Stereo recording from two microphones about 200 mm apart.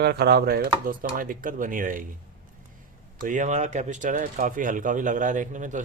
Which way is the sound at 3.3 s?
35° right (ahead or behind).